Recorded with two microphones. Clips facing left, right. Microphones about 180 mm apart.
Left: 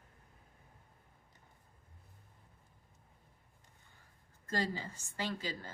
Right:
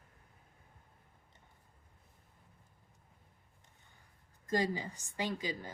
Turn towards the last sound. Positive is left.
turn(degrees=-15)  # may be behind; listen again after turning